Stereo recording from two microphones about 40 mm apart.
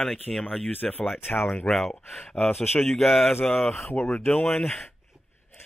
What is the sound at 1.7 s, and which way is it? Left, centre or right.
Speech, centre.